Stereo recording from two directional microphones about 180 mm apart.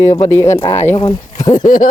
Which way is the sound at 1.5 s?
45° left (ahead or behind).